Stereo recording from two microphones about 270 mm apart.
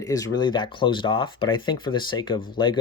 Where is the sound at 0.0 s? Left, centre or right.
Centre.